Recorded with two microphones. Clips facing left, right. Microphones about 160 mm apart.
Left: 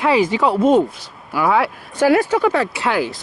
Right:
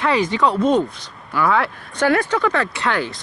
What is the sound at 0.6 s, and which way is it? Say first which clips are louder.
Speech: left 5 dB; 50° left (ahead or behind).